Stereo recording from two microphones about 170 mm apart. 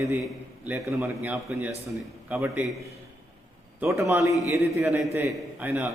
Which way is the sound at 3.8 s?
15° right (ahead or behind).